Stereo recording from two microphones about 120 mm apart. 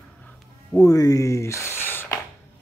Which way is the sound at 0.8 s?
30° left (ahead or behind).